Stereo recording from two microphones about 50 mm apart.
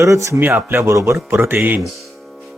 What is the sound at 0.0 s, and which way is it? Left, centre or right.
Speech, right.